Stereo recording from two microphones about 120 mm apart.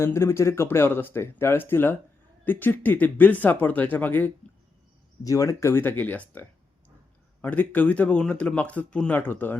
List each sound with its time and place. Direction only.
0.0 s speech: 20° left (ahead or behind)
5.2 s speech: 25° left (ahead or behind)
7.4 s speech: 15° left (ahead or behind)